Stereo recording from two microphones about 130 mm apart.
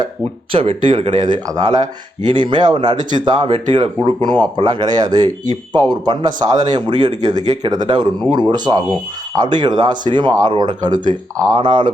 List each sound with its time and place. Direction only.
0.5 s speech: 45° right (ahead or behind)